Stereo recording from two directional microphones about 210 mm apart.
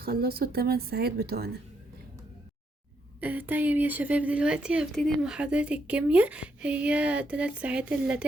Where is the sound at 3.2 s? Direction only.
10° right (ahead or behind).